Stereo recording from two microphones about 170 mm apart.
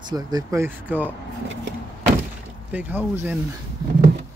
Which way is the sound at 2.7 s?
10° right (ahead or behind).